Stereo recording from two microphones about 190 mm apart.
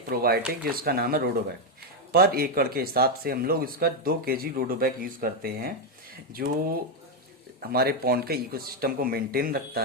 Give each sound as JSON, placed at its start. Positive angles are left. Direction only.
{"t": 0.1, "sound": "speech", "side_deg": -55}